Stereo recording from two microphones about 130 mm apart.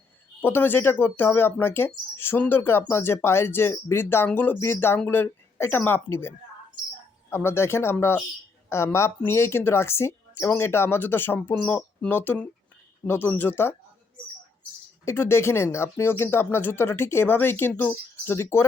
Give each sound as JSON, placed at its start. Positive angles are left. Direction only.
{"t": 0.4, "sound": "a woman's voice", "side_deg": 15}
{"t": 15.0, "sound": "speech", "side_deg": 20}